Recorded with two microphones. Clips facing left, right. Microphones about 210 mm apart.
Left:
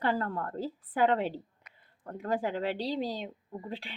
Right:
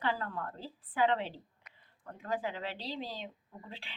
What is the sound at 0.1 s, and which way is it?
A woman's voice, 50° left (ahead or behind).